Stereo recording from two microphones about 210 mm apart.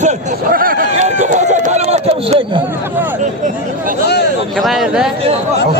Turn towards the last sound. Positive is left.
turn(degrees=0)  # may be behind; listen again after turning